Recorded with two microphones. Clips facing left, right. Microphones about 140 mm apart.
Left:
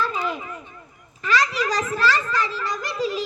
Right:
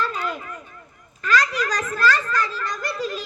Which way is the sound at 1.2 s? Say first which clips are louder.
Even; 10° left (ahead or behind).